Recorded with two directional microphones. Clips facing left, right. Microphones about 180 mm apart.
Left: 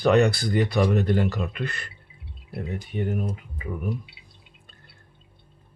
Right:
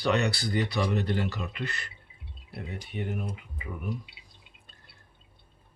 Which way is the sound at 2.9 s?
40° left (ahead or behind).